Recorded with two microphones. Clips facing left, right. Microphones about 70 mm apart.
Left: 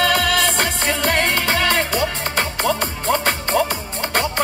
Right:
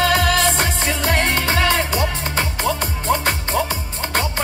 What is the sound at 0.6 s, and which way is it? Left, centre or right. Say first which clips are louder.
Music: left 1 dB; left.